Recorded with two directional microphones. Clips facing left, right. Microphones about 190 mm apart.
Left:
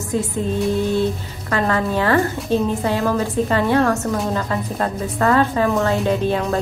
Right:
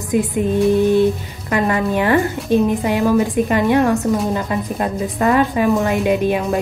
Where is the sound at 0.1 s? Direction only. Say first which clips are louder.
Right 5 dB; 15° right (ahead or behind).